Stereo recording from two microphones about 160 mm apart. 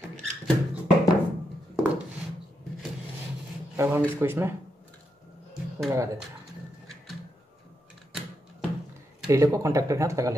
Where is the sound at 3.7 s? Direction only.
15° right (ahead or behind).